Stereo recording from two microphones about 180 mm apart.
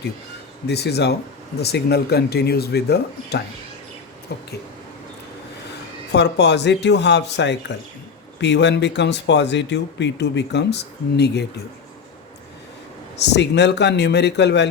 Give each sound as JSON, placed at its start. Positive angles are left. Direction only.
{"t": 0.7, "sound": "speech", "side_deg": 65}
{"t": 6.1, "sound": "speech", "side_deg": 70}
{"t": 13.1, "sound": "speech", "side_deg": 70}